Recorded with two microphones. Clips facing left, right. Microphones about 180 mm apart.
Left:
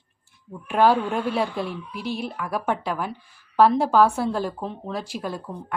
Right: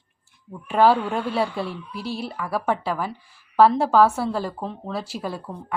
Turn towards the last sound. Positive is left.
turn(degrees=-5)  # may be behind; listen again after turning